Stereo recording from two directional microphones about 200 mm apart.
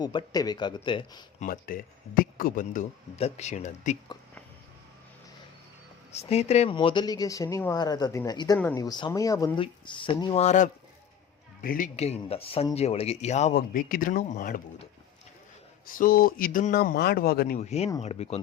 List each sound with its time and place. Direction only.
0.0 s speech: 20° left (ahead or behind)
1.4 s speech: 45° left (ahead or behind)
6.1 s speech: 30° left (ahead or behind)
15.9 s speech: 45° left (ahead or behind)
17.6 s speech: 35° left (ahead or behind)